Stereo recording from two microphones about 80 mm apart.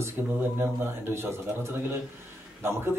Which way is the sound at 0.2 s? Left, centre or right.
Right.